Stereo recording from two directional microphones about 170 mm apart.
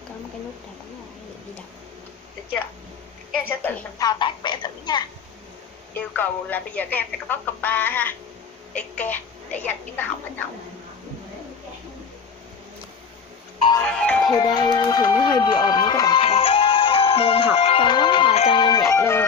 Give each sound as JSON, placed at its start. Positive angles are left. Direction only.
{"t": 3.4, "sound": "a sound", "side_deg": 10}
{"t": 4.0, "sound": "a sound", "side_deg": 25}
{"t": 5.9, "sound": "speech", "side_deg": 10}
{"t": 13.7, "sound": "speech", "side_deg": 5}
{"t": 14.3, "sound": "speech", "side_deg": 25}
{"t": 15.2, "sound": "music", "side_deg": 25}
{"t": 18.6, "sound": "music", "side_deg": 20}